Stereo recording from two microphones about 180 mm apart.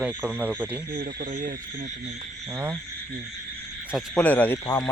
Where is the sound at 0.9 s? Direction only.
50° right (ahead or behind).